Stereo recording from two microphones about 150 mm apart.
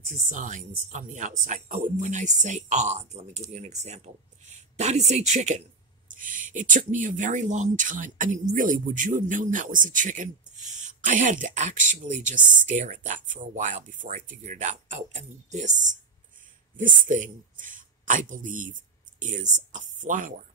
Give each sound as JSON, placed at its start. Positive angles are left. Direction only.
{"t": 0.1, "sound": "a woman's voice", "side_deg": -55}